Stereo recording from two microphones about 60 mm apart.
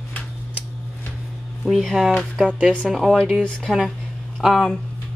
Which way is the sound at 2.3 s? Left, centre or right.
Centre.